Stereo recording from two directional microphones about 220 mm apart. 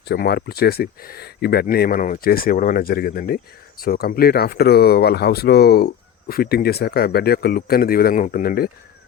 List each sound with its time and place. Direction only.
0.1 s speech: 45° left (ahead or behind)